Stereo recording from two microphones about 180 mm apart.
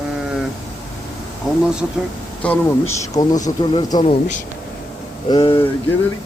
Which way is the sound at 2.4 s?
10° left (ahead or behind).